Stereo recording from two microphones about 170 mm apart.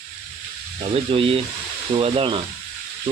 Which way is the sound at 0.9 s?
30° right (ahead or behind).